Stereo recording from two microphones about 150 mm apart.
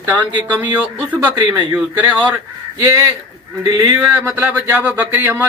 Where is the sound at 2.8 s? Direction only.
20° right (ahead or behind).